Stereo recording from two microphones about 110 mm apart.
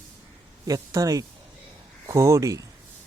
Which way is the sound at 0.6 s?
30° right (ahead or behind).